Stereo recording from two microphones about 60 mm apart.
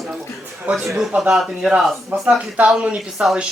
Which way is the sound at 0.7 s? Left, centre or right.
Right.